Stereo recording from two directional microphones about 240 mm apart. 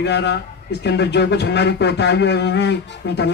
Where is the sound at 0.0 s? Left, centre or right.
Left.